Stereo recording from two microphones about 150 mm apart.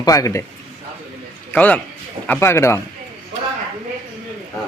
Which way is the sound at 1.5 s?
10° left (ahead or behind).